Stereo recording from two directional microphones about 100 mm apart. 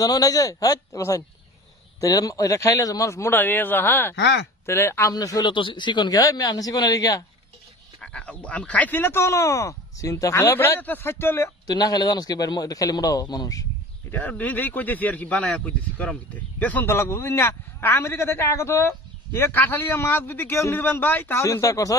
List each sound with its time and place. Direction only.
0.0 s a man's voice: 40° left (ahead or behind)
5.1 s a man's voice: 40° left (ahead or behind)
5.5 s a man's voice: 55° left (ahead or behind); by 7.2 s 35° left (ahead or behind)
8.0 s speech: 10° left (ahead or behind)
11.6 s a man's voice: 40° left (ahead or behind)
14.1 s speech: 15° left (ahead or behind); by 21.9 s 35° left (ahead or behind)